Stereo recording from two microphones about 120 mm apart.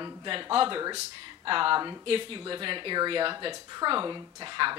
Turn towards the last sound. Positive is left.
turn(degrees=-40)  # may be behind; listen again after turning